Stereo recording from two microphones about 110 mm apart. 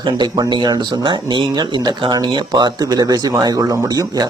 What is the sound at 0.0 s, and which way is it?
Speech, 40° right (ahead or behind).